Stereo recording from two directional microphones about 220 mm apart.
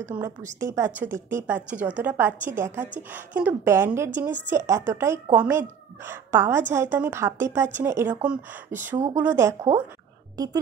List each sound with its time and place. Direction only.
0.0 s a woman's voice: 10° right (ahead or behind)